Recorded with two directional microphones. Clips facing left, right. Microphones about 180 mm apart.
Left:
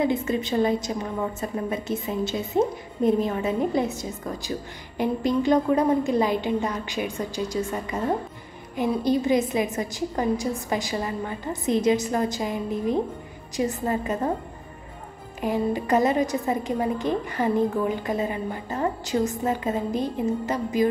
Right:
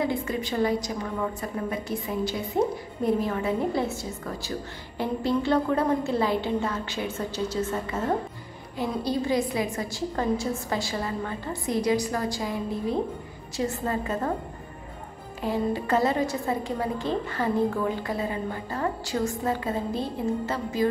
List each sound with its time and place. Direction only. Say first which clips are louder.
0.0 s a woman's voice: left 4 dB; 20° left (ahead or behind)
15.4 s a woman's voice: left 2 dB; 15° left (ahead or behind)